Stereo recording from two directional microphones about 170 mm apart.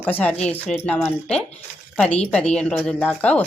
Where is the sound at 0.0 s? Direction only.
10° left (ahead or behind).